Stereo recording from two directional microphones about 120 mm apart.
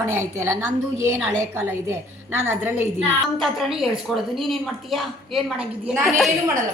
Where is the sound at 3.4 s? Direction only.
Centre (ahead or behind).